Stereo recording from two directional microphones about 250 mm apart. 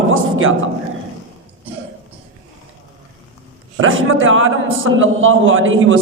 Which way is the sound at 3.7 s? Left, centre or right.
Right.